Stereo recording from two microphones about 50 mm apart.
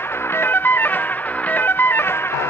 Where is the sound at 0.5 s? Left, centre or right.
Left.